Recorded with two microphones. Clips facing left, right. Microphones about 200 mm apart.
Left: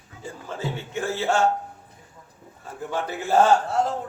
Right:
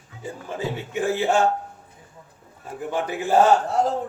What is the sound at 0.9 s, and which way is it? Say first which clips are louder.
Speech: right 3 dB; 15° right (ahead or behind).